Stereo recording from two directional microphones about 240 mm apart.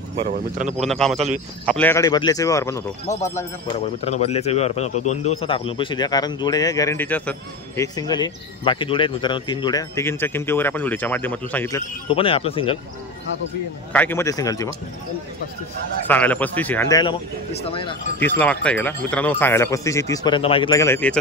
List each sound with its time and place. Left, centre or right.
0.2 s speech: right
0.7 s a man's voice: centre
4.0 s a man's voice: left; by 11.8 s centre
12.1 s speech: left
13.9 s a man's voice: centre
16.1 s a man's voice: centre; by 17.9 s left
18.2 s a man's voice: centre